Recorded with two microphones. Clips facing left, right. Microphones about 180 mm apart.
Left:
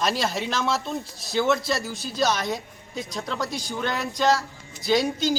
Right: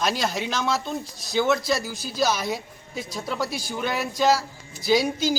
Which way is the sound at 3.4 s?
20° left (ahead or behind).